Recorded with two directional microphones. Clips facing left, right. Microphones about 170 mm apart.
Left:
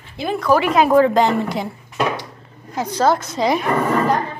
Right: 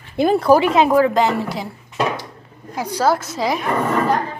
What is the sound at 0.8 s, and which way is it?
Speech, centre (ahead or behind).